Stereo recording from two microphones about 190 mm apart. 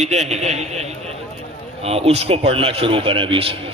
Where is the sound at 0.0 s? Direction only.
35° right (ahead or behind).